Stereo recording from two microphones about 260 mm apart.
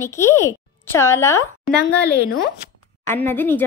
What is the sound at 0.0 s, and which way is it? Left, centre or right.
Speech, centre.